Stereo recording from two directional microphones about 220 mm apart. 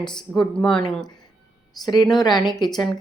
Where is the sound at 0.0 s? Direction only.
5° left (ahead or behind).